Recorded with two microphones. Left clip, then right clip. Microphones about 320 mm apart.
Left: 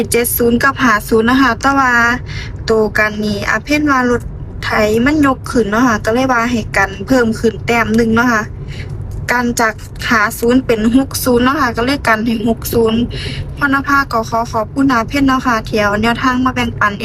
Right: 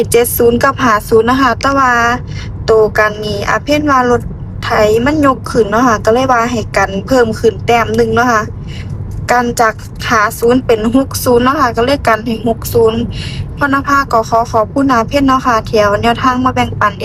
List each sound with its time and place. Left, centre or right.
0.0 s a woman's voice: centre